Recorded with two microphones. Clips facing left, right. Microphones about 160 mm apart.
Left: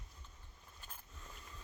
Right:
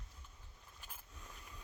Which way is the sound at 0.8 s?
5° right (ahead or behind).